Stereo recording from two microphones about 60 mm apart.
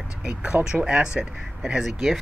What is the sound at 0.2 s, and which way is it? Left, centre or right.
Speech, right.